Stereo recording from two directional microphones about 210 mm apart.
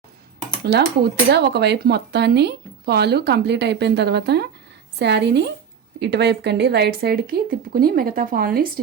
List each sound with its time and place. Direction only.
0.6 s a woman's voice: 50° right (ahead or behind)